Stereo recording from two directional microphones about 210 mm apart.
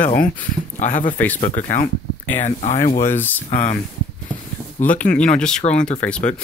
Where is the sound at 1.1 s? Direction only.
10° left (ahead or behind).